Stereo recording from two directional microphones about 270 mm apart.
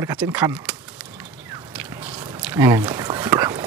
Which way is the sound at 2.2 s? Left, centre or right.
Centre.